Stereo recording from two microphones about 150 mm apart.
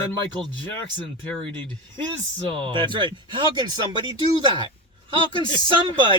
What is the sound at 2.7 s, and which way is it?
Speech, 35° right (ahead or behind).